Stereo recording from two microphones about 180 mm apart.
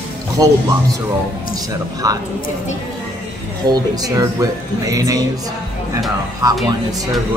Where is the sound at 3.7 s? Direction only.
20° right (ahead or behind).